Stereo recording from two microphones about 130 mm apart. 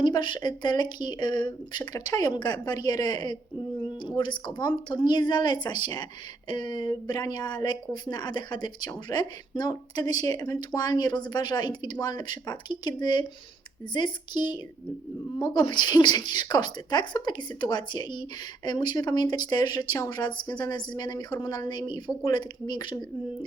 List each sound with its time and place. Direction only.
0.0 s speech: 35° left (ahead or behind)